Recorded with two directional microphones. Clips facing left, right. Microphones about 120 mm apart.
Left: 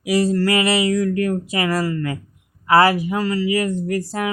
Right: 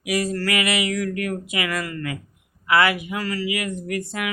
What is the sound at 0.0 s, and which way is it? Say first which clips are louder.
Speech: left 6 dB; 30° left (ahead or behind).